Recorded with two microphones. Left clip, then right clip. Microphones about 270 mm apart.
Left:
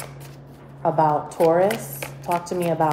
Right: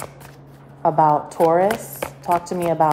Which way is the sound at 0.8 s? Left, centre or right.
Right.